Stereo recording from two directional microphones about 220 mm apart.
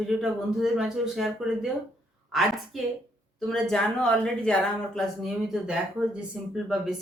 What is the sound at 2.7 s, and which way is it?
Speech, centre (ahead or behind).